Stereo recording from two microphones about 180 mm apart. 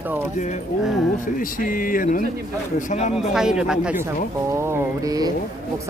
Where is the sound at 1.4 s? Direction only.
50° left (ahead or behind).